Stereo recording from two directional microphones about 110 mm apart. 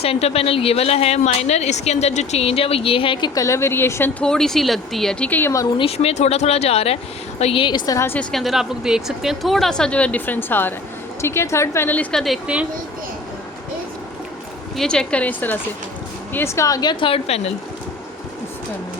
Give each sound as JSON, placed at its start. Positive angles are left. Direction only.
{"t": 0.0, "sound": "a woman's voice", "side_deg": 65}
{"t": 3.4, "sound": "a woman's voice", "side_deg": 25}
{"t": 4.2, "sound": "speech", "side_deg": 5}
{"t": 5.3, "sound": "a woman's voice", "side_deg": 20}
{"t": 5.7, "sound": "speech", "side_deg": 60}
{"t": 7.6, "sound": "a woman's voice", "side_deg": 40}
{"t": 7.9, "sound": "a woman's voice", "side_deg": 20}
{"t": 8.2, "sound": "a woman's voice", "side_deg": 0}
{"t": 12.5, "sound": "speech", "side_deg": -10}
{"t": 14.8, "sound": "a woman's voice", "side_deg": 5}